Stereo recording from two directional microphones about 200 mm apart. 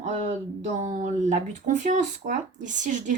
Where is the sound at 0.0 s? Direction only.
35° right (ahead or behind).